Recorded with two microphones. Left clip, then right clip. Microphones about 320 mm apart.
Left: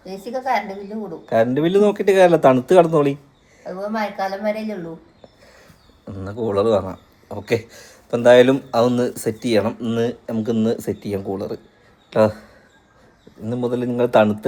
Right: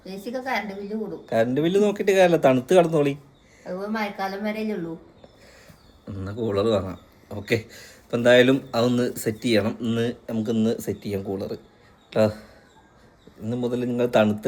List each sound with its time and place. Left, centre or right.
0.0 s a woman's voice: centre
3.6 s speech: centre
6.1 s speech: centre
10.2 s a woman's voice: centre
13.5 s a woman's voice: centre